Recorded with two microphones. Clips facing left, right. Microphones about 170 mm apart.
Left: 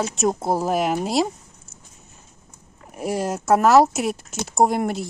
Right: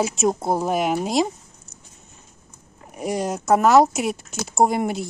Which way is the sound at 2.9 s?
5° left (ahead or behind).